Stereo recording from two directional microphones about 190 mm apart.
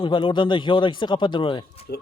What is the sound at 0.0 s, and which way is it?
Speech, 25° left (ahead or behind).